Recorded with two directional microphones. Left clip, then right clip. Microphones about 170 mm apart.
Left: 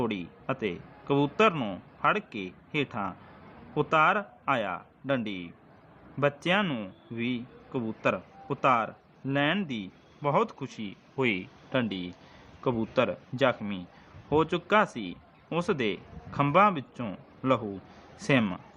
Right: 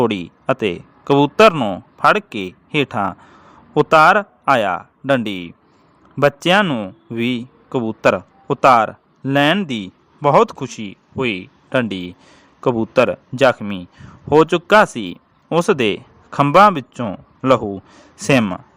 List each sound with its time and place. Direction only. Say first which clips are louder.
0.0 s speech: right 14 dB; 60° right (ahead or behind)
11.2 s a man's voice: right 7 dB; 35° right (ahead or behind)